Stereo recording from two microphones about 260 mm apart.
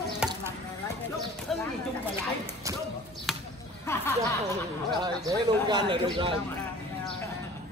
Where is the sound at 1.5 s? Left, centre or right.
Centre.